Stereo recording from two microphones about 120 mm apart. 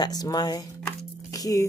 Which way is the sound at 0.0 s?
35° left (ahead or behind).